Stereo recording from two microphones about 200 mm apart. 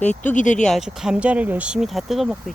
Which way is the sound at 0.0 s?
35° left (ahead or behind).